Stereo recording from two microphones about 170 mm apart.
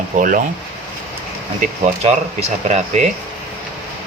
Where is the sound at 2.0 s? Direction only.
40° right (ahead or behind).